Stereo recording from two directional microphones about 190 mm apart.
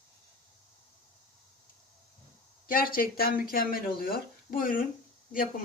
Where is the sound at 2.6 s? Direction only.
50° left (ahead or behind).